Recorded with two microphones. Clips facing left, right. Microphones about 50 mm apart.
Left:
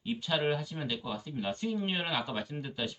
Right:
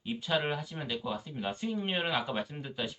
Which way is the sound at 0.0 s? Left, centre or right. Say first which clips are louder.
Even; centre.